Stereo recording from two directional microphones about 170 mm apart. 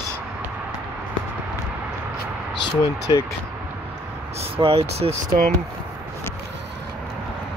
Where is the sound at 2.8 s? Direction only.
20° left (ahead or behind).